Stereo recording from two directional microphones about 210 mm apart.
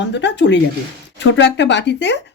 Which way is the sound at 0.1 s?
55° left (ahead or behind).